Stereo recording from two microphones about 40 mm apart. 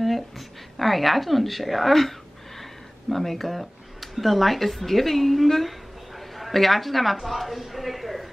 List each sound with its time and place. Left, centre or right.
0.7 s speech: centre